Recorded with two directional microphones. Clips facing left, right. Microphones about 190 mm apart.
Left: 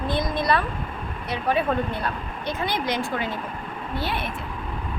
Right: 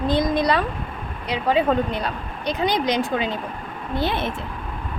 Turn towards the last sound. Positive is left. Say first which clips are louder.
# right 5 dB
turn(degrees=-25)  # may be behind; listen again after turning